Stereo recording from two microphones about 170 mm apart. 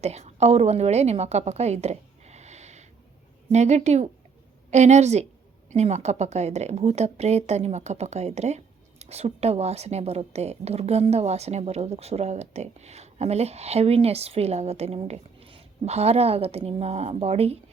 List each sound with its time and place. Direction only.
0.0 s a woman's voice: 40° right (ahead or behind)